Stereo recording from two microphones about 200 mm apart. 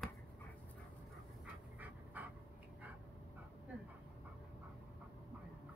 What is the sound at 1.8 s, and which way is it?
Pant, 10° right (ahead or behind).